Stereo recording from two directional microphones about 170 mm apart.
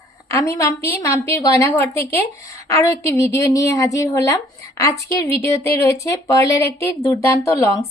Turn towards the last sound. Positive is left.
turn(degrees=15)  # may be behind; listen again after turning